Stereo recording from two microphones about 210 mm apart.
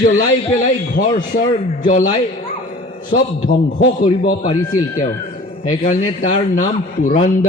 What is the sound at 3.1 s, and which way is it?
Speech, 40° left (ahead or behind).